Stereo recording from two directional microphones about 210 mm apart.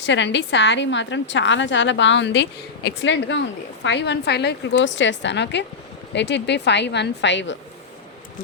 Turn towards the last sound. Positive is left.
turn(degrees=60)  # may be behind; listen again after turning